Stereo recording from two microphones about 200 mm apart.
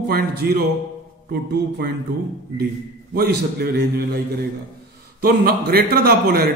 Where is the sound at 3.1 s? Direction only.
50° right (ahead or behind).